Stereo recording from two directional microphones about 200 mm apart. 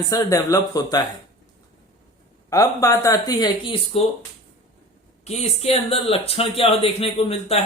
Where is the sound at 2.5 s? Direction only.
15° left (ahead or behind).